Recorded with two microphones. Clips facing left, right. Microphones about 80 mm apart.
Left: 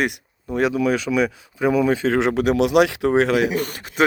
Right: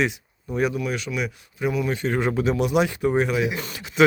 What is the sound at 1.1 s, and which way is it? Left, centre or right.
Speech, left.